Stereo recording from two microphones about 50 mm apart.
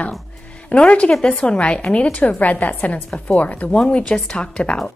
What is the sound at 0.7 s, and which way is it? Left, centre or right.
A woman's voice, left.